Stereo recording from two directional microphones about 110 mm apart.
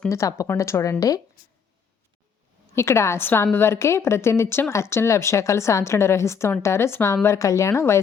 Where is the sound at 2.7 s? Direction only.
25° left (ahead or behind).